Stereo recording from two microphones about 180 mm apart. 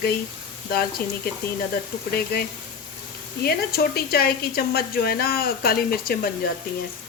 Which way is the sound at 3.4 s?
60° left (ahead or behind).